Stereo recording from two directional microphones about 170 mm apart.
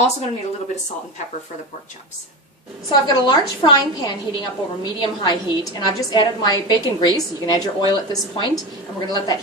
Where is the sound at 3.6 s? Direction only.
25° left (ahead or behind).